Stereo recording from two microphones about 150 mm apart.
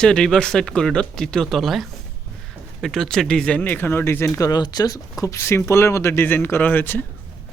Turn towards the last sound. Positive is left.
turn(degrees=15)  # may be behind; listen again after turning